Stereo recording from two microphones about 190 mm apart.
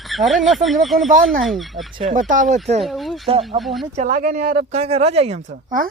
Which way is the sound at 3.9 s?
40° right (ahead or behind).